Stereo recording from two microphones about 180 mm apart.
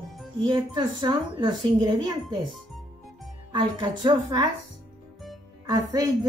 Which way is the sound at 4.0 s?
25° right (ahead or behind).